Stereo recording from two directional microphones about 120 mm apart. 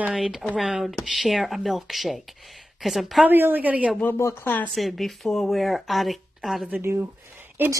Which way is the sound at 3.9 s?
20° left (ahead or behind).